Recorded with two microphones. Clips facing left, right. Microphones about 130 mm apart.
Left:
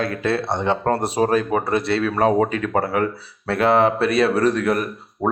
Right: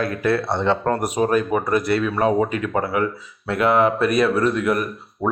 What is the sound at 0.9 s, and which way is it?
Speech, 30° left (ahead or behind).